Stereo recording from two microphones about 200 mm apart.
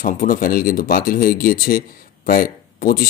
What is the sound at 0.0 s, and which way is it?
Speech, 45° left (ahead or behind).